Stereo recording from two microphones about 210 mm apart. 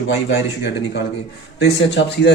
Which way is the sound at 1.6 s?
55° left (ahead or behind).